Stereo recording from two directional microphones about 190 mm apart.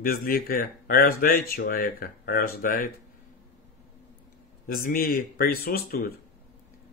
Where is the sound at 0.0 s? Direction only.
50° left (ahead or behind).